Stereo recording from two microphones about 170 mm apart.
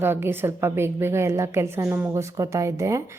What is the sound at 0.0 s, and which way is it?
A woman's voice, 15° right (ahead or behind).